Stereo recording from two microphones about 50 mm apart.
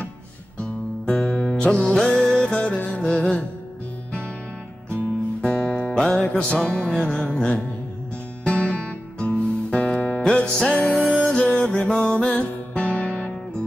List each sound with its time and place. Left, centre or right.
0.6 s music: left
1.5 s music: centre
4.8 s music: left
5.9 s music: centre
6.2 s music: left
10.9 s music: left
11.2 s music: centre